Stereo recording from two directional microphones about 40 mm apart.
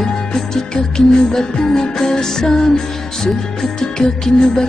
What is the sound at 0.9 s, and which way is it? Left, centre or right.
Music, centre.